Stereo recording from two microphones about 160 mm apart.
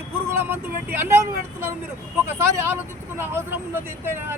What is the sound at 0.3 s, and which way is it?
Speech, 15° right (ahead or behind).